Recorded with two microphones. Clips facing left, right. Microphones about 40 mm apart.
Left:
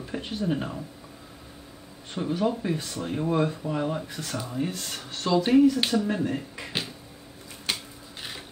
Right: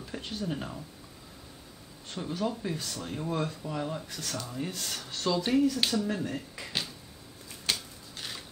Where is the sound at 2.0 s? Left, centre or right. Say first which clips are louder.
Left 6 dB; centre.